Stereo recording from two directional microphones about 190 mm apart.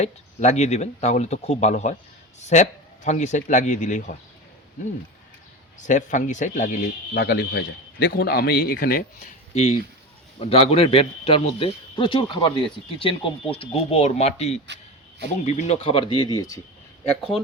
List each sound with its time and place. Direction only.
0.0 s speech: 35° left (ahead or behind)
5.8 s speech: 40° left (ahead or behind)
7.1 s a man's voice: 60° left (ahead or behind)
10.4 s speech: 30° left (ahead or behind)